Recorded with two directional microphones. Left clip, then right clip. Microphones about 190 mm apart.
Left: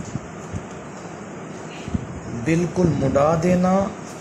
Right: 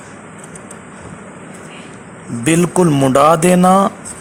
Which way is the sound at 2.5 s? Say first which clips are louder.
Right 8 dB; 45° right (ahead or behind).